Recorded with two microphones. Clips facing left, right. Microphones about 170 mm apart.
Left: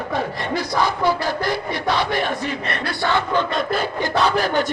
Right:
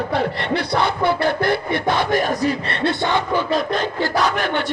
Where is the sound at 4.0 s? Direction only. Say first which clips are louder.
Left 2 dB; 30° left (ahead or behind).